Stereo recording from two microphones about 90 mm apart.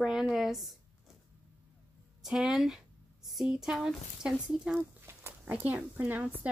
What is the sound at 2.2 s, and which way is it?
Speech, 5° right (ahead or behind).